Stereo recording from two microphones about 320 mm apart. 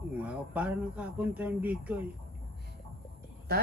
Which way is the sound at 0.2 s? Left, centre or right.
Centre.